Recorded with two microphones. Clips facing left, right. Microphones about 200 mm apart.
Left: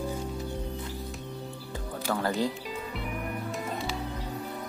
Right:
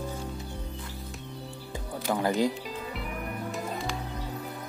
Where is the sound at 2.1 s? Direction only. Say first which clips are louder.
Right 2 dB; 15° right (ahead or behind).